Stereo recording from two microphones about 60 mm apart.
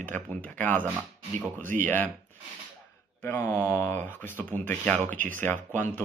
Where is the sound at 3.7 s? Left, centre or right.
Left.